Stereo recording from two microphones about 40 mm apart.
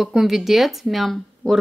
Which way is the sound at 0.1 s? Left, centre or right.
Centre.